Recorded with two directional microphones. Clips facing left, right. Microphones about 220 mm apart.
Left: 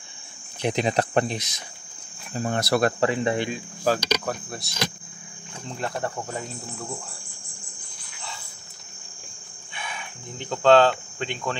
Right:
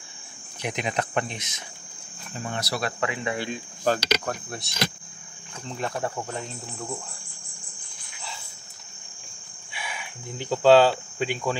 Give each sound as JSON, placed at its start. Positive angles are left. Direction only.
{"t": 0.6, "sound": "speech", "side_deg": 30}
{"t": 3.0, "sound": "speech", "side_deg": 35}
{"t": 3.9, "sound": "speech", "side_deg": 5}
{"t": 5.8, "sound": "speech", "side_deg": 0}
{"t": 9.8, "sound": "cricket", "side_deg": -5}